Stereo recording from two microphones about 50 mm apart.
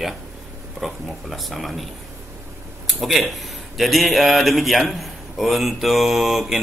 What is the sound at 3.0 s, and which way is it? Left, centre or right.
A man's voice, centre.